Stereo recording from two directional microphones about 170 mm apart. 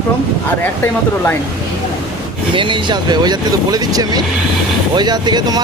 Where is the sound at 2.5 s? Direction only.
30° right (ahead or behind).